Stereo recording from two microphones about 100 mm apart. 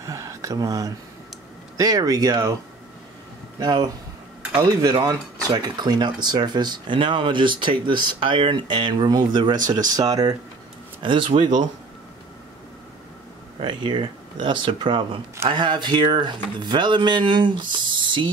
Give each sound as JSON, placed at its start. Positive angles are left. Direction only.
{"t": 0.0, "sound": "a sound", "side_deg": -30}
{"t": 1.8, "sound": "speech", "side_deg": -40}
{"t": 3.5, "sound": "speech", "side_deg": -45}
{"t": 11.0, "sound": "speech", "side_deg": -55}
{"t": 13.6, "sound": "speech", "side_deg": -55}